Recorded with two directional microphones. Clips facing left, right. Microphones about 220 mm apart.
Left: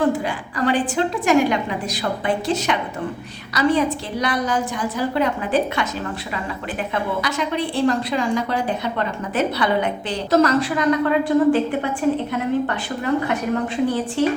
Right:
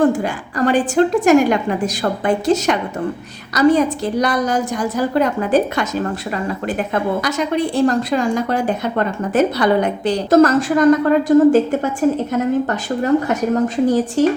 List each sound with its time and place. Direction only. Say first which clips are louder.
0.0 s a woman's voice: right 4 dB; 45° right (ahead or behind)